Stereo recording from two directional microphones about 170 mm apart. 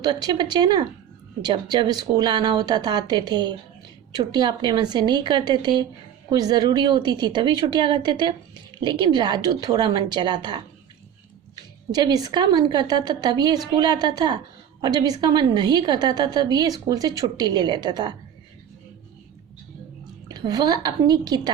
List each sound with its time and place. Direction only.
0.0 s speech: 25° right (ahead or behind)
20.2 s speech: 25° right (ahead or behind)